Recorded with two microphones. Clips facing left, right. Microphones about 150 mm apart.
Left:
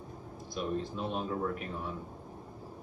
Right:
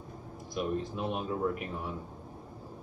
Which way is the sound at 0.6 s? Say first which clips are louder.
Right 2 dB; 10° right (ahead or behind).